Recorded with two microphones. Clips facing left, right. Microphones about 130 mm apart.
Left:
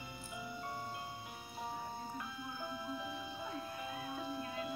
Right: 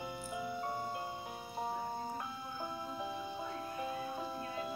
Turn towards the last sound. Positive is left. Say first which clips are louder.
# right 1 dB
turn(degrees=-40)  # may be behind; listen again after turning